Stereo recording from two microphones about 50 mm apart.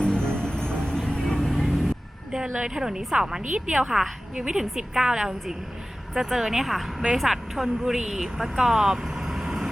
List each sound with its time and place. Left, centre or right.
0.0 s music: centre
1.4 s vehicle: centre
2.5 s a woman's voice: centre